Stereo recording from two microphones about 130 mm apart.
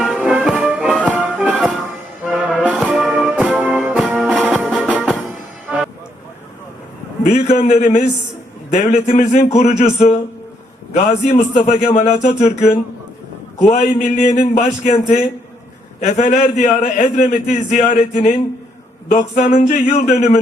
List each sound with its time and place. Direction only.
0.0 s music: 5° right (ahead or behind)
7.3 s a man's voice: 60° left (ahead or behind)
8.7 s a man's voice: 60° left (ahead or behind)
10.9 s a man's voice: 65° left (ahead or behind)